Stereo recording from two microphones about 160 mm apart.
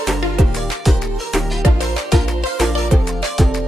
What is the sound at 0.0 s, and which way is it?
Music, centre (ahead or behind).